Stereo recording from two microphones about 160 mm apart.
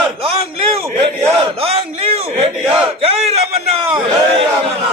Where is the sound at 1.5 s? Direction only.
40° right (ahead or behind).